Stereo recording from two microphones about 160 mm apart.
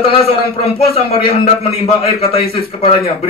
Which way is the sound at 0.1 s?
35° left (ahead or behind).